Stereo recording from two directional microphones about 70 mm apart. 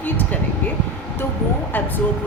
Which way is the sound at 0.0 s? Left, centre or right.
Left.